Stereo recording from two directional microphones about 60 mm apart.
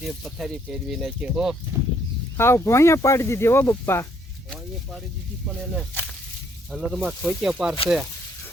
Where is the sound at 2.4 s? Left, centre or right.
Left.